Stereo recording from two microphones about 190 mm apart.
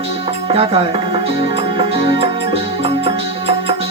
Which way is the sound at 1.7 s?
25° right (ahead or behind).